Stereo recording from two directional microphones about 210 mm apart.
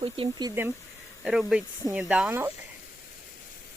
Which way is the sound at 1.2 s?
5° right (ahead or behind).